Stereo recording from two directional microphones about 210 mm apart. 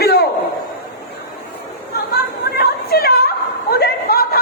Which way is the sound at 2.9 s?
45° left (ahead or behind).